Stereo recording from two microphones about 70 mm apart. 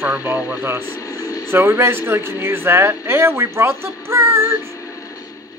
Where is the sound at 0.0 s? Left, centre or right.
Right.